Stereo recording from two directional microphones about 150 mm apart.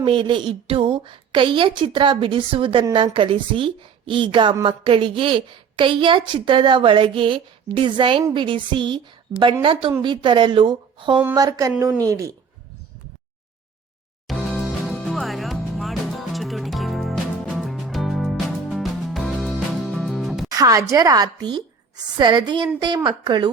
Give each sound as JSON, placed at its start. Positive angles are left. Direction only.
{"t": 0.0, "sound": "a woman's voice", "side_deg": -35}
{"t": 14.3, "sound": "music", "side_deg": 0}
{"t": 20.6, "sound": "a woman's voice", "side_deg": -20}